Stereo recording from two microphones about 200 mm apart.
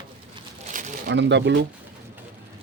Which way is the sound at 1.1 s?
60° right (ahead or behind).